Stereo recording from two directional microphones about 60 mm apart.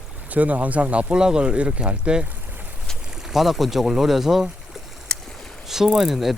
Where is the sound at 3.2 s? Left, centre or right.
Centre.